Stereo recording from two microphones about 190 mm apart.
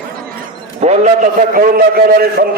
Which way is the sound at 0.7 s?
35° right (ahead or behind).